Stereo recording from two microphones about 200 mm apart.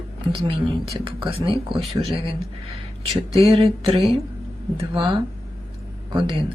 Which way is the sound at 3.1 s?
30° right (ahead or behind).